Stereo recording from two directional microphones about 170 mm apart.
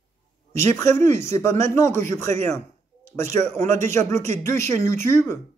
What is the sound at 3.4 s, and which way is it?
Speech, 10° left (ahead or behind).